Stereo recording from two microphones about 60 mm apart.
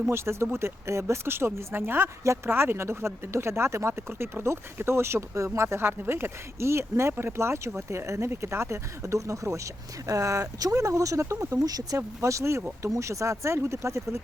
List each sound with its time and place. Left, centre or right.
0.0 s speech: right
11.9 s speech: right